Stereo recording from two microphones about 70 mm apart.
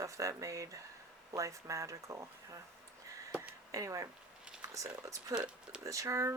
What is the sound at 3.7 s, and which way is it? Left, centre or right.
Speech, right.